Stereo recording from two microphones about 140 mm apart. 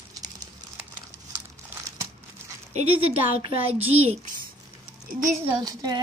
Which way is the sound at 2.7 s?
45° right (ahead or behind).